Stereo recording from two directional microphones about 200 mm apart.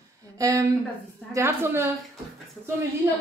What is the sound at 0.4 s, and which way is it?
Speech, 15° right (ahead or behind).